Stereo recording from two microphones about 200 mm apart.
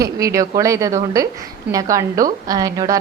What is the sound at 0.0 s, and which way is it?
A man's voice, 15° right (ahead or behind).